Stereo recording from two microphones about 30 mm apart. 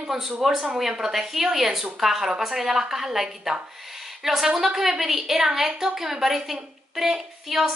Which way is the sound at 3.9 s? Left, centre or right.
Centre.